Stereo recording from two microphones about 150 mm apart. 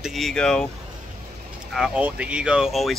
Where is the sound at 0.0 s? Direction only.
Centre (ahead or behind).